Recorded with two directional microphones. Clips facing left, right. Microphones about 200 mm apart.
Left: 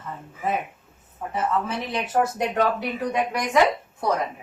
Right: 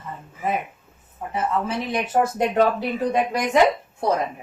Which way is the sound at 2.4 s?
25° right (ahead or behind).